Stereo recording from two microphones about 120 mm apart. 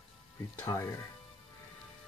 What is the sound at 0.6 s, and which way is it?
Speech, 25° left (ahead or behind).